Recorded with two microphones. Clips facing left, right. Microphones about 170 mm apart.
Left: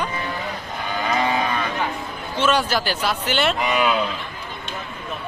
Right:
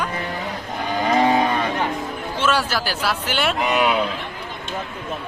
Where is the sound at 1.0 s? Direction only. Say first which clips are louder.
Right 5 dB; 35° right (ahead or behind).